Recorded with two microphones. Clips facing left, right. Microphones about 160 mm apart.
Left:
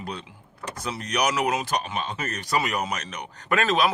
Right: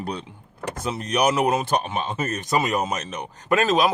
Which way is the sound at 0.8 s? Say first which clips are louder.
Right 4 dB; 25° right (ahead or behind).